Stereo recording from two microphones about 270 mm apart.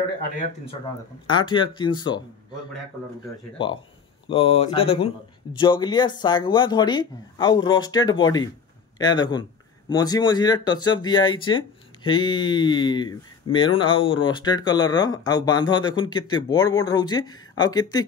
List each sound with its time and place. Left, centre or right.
1.2 s speech: centre
4.3 s speech: left